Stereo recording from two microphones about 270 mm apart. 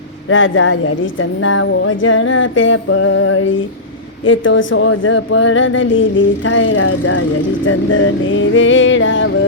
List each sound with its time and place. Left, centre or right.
0.3 s speech: left